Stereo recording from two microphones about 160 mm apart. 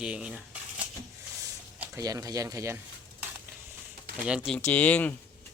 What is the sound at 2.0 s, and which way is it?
Speech, 20° right (ahead or behind).